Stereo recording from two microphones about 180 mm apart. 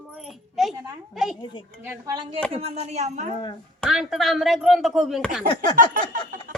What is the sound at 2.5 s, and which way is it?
Speech, 35° right (ahead or behind).